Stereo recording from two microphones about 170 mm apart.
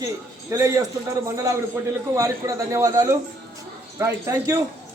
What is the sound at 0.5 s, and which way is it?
Speech, 20° right (ahead or behind).